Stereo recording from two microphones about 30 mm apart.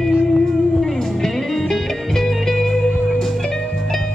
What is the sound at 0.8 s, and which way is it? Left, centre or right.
Music, centre.